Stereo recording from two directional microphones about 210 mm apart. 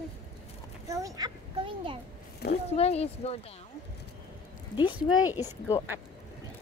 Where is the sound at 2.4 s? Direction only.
50° left (ahead or behind).